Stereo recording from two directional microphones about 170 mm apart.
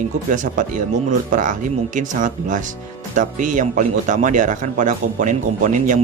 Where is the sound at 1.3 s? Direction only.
50° right (ahead or behind).